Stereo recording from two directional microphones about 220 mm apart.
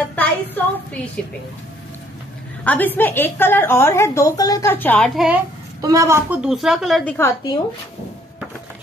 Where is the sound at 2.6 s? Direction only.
10° left (ahead or behind).